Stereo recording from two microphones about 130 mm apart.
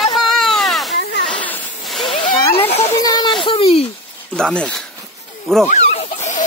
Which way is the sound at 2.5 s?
50° left (ahead or behind).